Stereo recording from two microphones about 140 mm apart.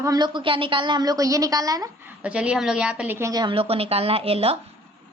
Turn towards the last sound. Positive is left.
turn(degrees=-45)  # may be behind; listen again after turning